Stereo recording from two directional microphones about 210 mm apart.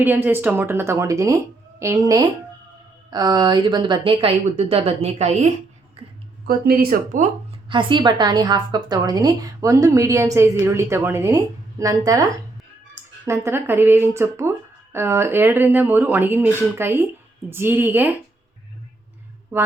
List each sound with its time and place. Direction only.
0.0 s a woman's voice: 10° right (ahead or behind); by 5.5 s 30° right (ahead or behind)
6.0 s a sound: 30° right (ahead or behind)
6.4 s speech: 45° right (ahead or behind)
7.7 s a woman's voice: 20° right (ahead or behind)